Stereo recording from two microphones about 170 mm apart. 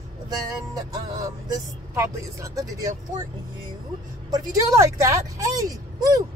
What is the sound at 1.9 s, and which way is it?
Speech, 20° right (ahead or behind).